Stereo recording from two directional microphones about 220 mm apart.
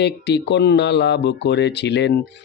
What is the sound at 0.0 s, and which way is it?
Speech, 50° left (ahead or behind).